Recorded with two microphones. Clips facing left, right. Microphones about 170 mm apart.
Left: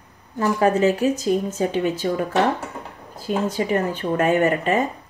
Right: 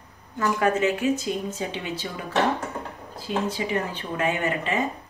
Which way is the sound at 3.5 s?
50° left (ahead or behind).